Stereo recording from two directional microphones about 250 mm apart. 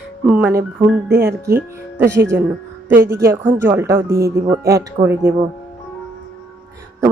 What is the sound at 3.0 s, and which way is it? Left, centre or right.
Speech, centre.